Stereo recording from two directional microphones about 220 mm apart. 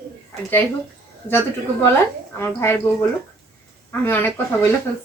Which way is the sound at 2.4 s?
10° left (ahead or behind).